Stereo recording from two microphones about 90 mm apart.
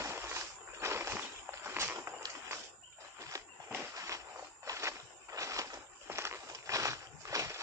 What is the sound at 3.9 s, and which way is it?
Walk, 35° right (ahead or behind).